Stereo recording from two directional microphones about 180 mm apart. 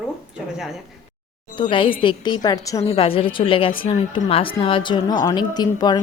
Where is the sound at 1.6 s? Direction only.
25° left (ahead or behind).